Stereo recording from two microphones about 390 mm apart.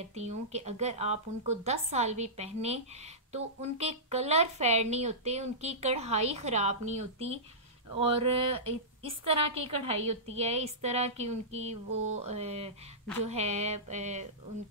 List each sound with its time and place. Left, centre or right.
0.0 s a woman's voice: centre